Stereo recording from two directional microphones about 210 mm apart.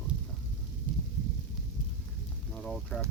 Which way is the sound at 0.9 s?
40° left (ahead or behind).